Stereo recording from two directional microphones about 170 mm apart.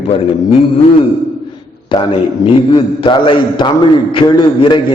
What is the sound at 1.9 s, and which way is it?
A man's voice, 30° left (ahead or behind).